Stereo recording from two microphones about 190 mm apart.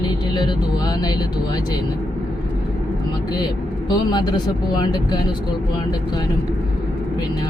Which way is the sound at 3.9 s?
20° left (ahead or behind).